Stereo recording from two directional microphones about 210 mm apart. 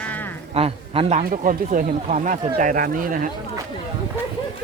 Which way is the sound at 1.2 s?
40° right (ahead or behind).